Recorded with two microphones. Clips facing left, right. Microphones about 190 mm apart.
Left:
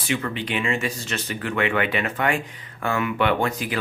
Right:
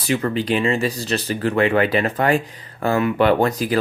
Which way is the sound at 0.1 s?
35° right (ahead or behind).